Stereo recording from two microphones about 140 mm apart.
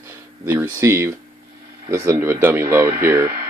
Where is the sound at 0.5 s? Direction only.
15° right (ahead or behind).